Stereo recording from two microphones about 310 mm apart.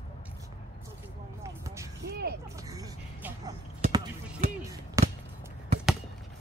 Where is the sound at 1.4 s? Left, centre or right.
Centre.